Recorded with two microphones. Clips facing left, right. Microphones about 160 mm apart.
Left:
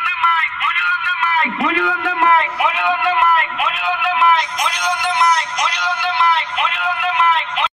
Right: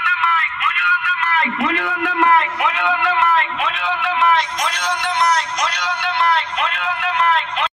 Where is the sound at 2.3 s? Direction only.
20° left (ahead or behind).